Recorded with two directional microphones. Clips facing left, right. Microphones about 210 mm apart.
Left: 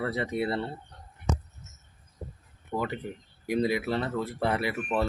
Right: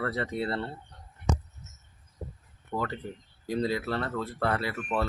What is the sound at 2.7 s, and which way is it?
Speech, 15° left (ahead or behind).